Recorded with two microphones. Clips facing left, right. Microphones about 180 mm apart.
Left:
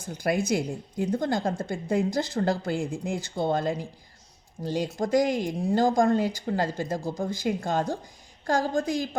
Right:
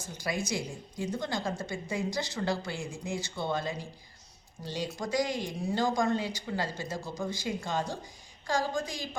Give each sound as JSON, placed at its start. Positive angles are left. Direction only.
{"t": 0.1, "sound": "a woman's voice", "side_deg": 60}